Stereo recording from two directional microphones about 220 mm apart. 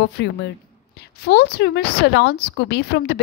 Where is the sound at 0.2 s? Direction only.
50° left (ahead or behind).